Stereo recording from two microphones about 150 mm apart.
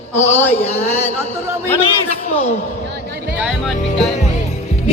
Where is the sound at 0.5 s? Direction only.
45° left (ahead or behind).